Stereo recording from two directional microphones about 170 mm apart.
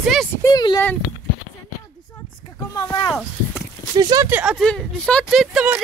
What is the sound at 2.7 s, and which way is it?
Speech, 20° left (ahead or behind).